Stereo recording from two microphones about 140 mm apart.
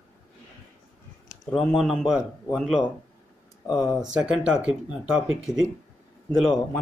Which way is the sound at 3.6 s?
30° left (ahead or behind).